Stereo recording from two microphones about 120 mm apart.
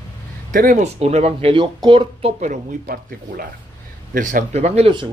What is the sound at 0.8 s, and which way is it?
Speech, 65° right (ahead or behind).